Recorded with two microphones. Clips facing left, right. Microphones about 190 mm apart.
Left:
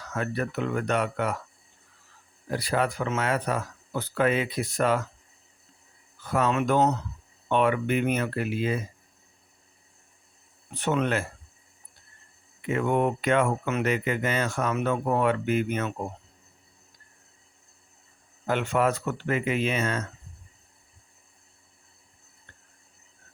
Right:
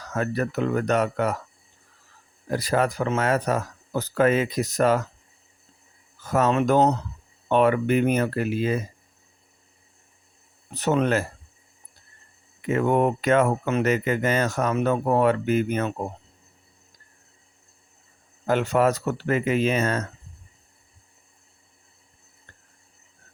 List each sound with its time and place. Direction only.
0.0 s speech: 40° right (ahead or behind)
2.5 s speech: 40° right (ahead or behind)
6.1 s speech: 40° right (ahead or behind)
10.7 s speech: 40° right (ahead or behind)
12.6 s speech: 40° right (ahead or behind)
18.4 s speech: 40° right (ahead or behind)